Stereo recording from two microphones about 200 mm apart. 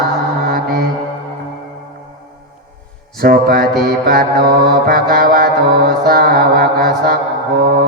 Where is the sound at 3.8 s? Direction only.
50° right (ahead or behind).